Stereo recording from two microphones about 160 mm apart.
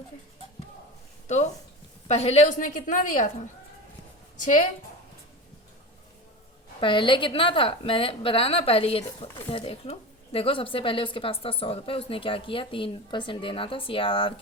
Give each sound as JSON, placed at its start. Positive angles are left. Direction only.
{"t": 2.0, "sound": "a woman's voice", "side_deg": 40}
{"t": 6.7, "sound": "speech", "side_deg": 30}